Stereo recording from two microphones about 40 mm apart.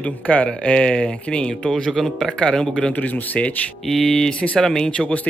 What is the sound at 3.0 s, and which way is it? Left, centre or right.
Speech, left.